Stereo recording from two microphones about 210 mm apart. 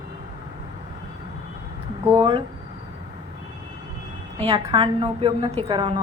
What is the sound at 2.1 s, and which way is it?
Speech, 25° right (ahead or behind).